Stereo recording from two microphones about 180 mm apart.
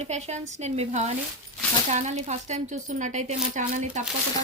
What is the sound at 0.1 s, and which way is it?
Speech, 35° right (ahead or behind).